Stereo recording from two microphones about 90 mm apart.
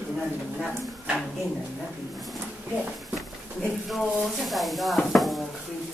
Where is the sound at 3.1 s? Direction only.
Centre (ahead or behind).